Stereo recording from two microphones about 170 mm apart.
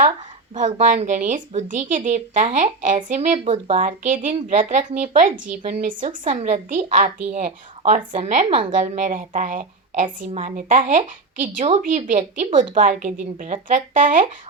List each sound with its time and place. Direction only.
0.5 s a woman's voice: 45° right (ahead or behind)